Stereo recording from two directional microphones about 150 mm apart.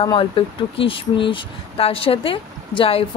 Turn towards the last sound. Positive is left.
turn(degrees=40)  # may be behind; listen again after turning